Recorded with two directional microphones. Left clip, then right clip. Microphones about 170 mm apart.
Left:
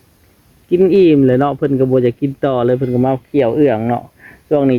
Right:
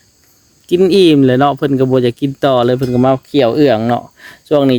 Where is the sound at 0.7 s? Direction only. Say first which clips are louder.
Right 1 dB; 35° right (ahead or behind).